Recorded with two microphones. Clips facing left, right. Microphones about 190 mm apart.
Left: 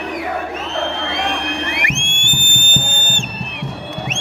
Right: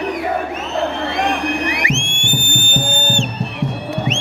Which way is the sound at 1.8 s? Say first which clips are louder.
Right 3 dB; 55° left (ahead or behind).